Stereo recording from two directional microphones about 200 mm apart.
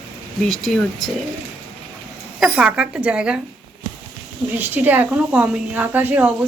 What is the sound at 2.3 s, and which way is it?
A woman's voice, 5° right (ahead or behind).